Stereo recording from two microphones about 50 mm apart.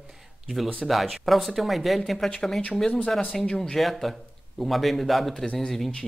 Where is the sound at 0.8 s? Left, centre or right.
Centre.